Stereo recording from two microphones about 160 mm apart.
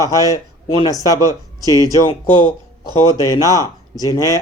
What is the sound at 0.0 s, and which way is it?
Speech, 20° left (ahead or behind).